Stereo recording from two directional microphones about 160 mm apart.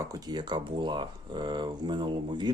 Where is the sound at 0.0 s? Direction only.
25° right (ahead or behind).